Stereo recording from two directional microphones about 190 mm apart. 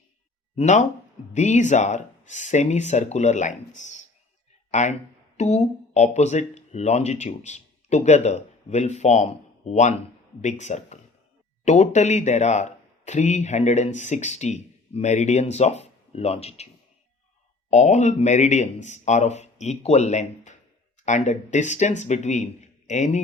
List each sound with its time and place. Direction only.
0.5 s speech: 40° left (ahead or behind)
17.7 s speech: 40° left (ahead or behind)